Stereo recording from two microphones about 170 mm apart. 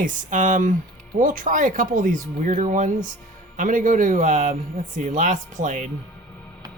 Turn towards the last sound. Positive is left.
turn(degrees=-50)  # may be behind; listen again after turning